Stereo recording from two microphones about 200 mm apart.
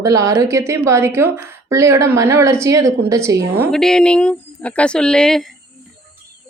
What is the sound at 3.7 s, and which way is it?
Speech, centre (ahead or behind).